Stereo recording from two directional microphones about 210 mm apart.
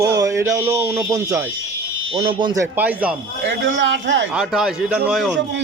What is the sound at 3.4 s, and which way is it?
Speech, 60° right (ahead or behind).